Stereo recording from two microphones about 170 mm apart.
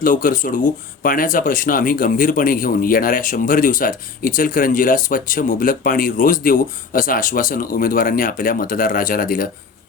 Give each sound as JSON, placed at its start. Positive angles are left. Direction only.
{"t": 0.0, "sound": "speech", "side_deg": 55}